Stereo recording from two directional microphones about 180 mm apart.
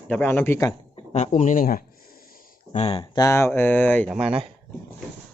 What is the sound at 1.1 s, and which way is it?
Speech, 40° left (ahead or behind).